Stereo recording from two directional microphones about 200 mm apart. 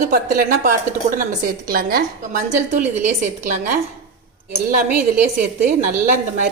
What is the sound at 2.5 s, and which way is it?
A woman's voice, 35° right (ahead or behind).